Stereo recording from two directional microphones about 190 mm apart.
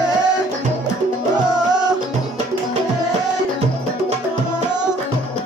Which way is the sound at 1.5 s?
20° right (ahead or behind).